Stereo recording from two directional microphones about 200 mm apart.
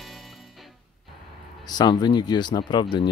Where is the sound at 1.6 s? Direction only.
20° left (ahead or behind).